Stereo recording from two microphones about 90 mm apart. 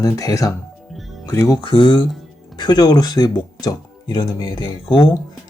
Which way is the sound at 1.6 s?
65° left (ahead or behind).